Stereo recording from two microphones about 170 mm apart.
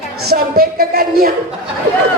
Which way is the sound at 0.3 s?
65° right (ahead or behind).